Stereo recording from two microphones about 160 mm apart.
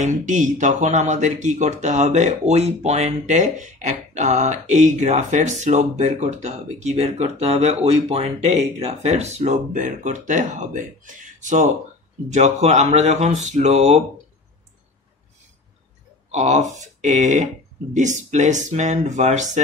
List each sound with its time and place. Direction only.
0.0 s speech: 50° right (ahead or behind)
16.3 s speech: 45° right (ahead or behind)